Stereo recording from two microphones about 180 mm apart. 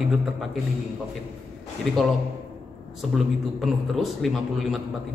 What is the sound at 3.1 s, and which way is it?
A man's voice, centre (ahead or behind).